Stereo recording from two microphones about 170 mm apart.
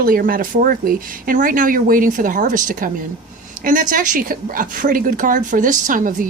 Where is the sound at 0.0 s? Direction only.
55° right (ahead or behind).